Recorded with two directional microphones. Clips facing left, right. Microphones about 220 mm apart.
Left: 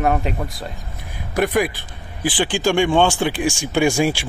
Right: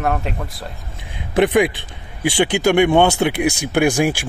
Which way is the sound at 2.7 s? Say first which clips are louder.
Right 2 dB; 20° right (ahead or behind).